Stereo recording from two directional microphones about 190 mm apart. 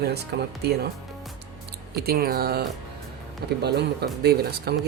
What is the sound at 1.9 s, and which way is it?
Speech, 55° right (ahead or behind).